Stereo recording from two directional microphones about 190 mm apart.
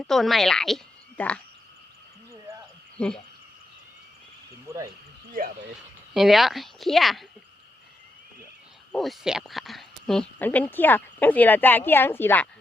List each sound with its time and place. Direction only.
0.0 s a woman's voice: centre (ahead or behind)
3.0 s a woman's voice: 5° left (ahead or behind)
4.7 s a sound: 15° right (ahead or behind)
5.4 s speech: 50° right (ahead or behind)
6.1 s speech: centre (ahead or behind)
8.9 s a woman's voice: centre (ahead or behind)